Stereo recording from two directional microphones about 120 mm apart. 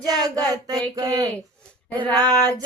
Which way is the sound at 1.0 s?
30° right (ahead or behind).